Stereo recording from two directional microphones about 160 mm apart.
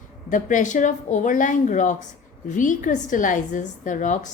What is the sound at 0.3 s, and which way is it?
A woman's voice, 55° left (ahead or behind).